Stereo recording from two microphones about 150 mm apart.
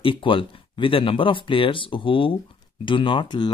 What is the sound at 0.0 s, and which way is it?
Speech, 35° left (ahead or behind).